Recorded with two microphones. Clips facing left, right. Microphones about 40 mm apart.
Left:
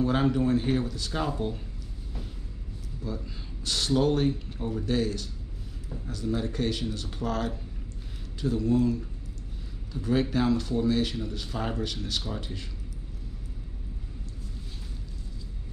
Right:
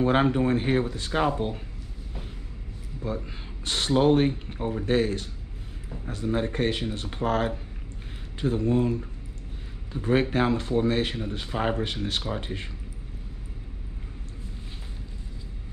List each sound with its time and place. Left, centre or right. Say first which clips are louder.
0.0 s speech: right 3 dB; right
3.6 s speech: right 3 dB; right